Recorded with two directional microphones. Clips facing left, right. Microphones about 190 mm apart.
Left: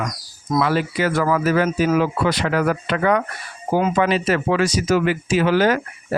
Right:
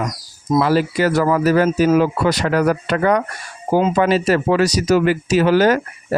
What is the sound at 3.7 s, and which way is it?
Speech, 25° right (ahead or behind).